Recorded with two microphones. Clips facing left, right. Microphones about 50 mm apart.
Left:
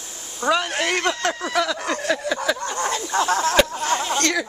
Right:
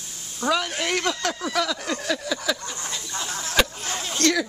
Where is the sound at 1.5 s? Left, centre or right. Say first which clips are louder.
Left 2 dB; centre.